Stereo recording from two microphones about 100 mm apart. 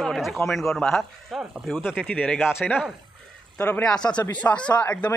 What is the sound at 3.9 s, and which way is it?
Speech, 10° left (ahead or behind).